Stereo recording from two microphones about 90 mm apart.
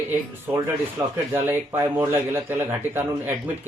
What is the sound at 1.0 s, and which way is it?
Speech, 45° right (ahead or behind).